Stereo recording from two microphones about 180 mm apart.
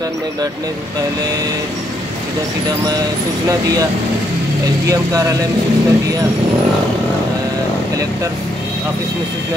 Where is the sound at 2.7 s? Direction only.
20° right (ahead or behind).